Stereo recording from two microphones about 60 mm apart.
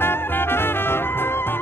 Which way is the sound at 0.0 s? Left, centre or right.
Left.